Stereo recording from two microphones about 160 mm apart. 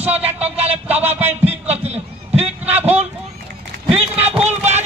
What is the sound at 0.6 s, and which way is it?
Music, 10° right (ahead or behind).